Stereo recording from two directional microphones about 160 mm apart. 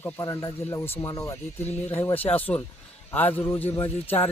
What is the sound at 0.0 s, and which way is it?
Speech, 20° left (ahead or behind).